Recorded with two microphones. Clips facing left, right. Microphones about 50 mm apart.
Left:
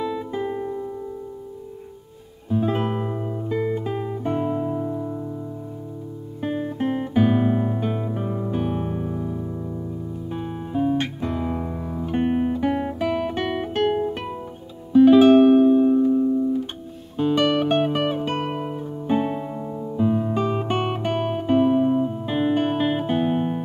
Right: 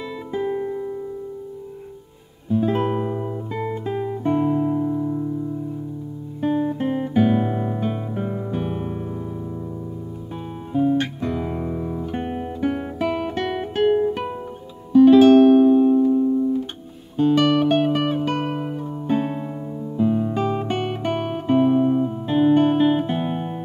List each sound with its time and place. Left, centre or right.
2.5 s music: centre
6.4 s guitar: centre
10.3 s music: centre
12.1 s music: centre
12.5 s guitar: centre
14.9 s music: centre